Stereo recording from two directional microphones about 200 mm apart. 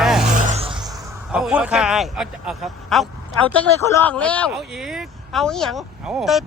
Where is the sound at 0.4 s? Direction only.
30° right (ahead or behind).